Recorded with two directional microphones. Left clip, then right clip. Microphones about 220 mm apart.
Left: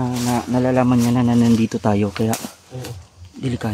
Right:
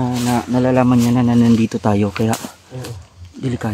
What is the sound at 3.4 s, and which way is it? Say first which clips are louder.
Speech: right 2 dB; 5° left (ahead or behind).